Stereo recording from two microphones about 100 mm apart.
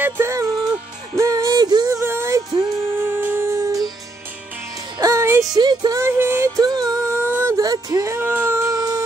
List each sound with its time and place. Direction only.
0.0 s music: 30° right (ahead or behind)
5.0 s music: 25° right (ahead or behind)
5.5 s speech: 45° right (ahead or behind)
5.9 s music: 25° right (ahead or behind)
6.5 s music: 40° right (ahead or behind)
7.2 s a sound: 25° right (ahead or behind)
7.5 s music: 40° right (ahead or behind)